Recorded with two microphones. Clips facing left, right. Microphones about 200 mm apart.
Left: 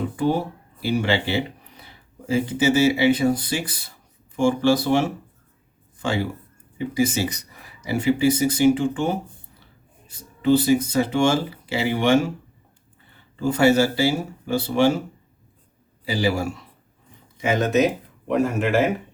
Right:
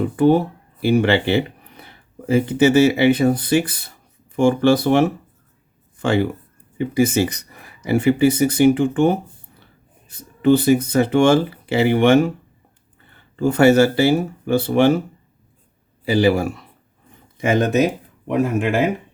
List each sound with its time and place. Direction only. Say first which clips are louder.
0.2 s speech: right 8 dB; 55° right (ahead or behind)
13.3 s speech: right 4 dB; 55° right (ahead or behind)
16.0 s speech: right 6 dB; 60° right (ahead or behind)